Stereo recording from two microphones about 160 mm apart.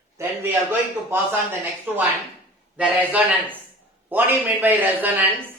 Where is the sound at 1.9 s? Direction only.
10° right (ahead or behind).